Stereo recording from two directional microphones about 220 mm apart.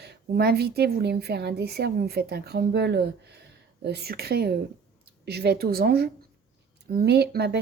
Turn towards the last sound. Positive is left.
turn(degrees=-50)  # may be behind; listen again after turning